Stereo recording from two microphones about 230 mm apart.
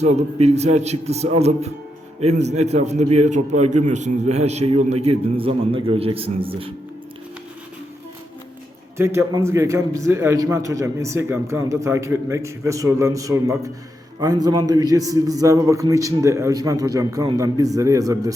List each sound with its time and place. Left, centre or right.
0.0 s a man's voice: right
9.0 s a man's voice: centre